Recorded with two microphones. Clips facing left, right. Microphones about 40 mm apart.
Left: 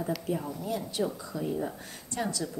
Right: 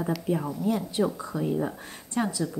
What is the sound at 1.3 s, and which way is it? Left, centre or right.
Speech, right.